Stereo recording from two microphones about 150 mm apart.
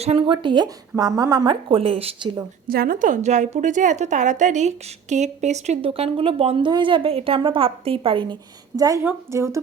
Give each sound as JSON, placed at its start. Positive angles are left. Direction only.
{"t": 0.0, "sound": "a woman's voice", "side_deg": -40}
{"t": 2.6, "sound": "a woman's voice", "side_deg": -75}